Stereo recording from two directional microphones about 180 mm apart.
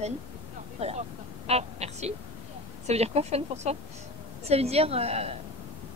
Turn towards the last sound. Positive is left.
turn(degrees=-35)  # may be behind; listen again after turning